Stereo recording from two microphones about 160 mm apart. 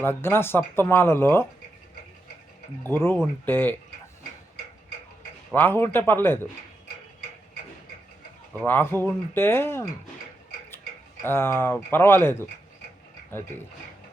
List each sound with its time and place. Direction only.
0.0 s speech: 15° left (ahead or behind)
2.9 s speech: 15° left (ahead or behind)
5.5 s speech: 15° left (ahead or behind)
8.5 s speech: 10° left (ahead or behind)
11.2 s speech: 15° left (ahead or behind)